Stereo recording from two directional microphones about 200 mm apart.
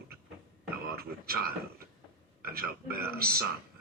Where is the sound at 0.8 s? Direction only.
50° right (ahead or behind).